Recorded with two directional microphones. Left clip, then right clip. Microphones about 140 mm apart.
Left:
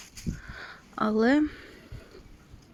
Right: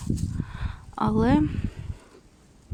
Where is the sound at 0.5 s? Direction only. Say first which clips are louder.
Right 1 dB; 40° right (ahead or behind).